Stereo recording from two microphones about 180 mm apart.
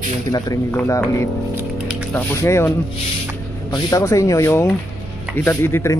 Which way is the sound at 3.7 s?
20° left (ahead or behind).